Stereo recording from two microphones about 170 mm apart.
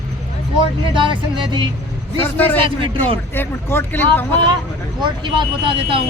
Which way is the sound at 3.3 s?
15° left (ahead or behind).